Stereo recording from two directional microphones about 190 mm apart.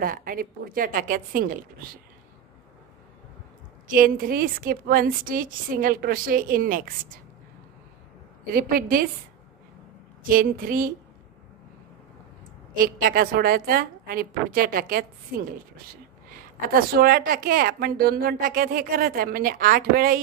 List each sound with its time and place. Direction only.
0.0 s a woman's voice: 50° right (ahead or behind)
3.8 s a woman's voice: 45° right (ahead or behind)
8.5 s a woman's voice: 50° right (ahead or behind)
10.2 s a woman's voice: 50° right (ahead or behind)
12.7 s a woman's voice: 50° right (ahead or behind)
16.3 s a woman's voice: 50° right (ahead or behind)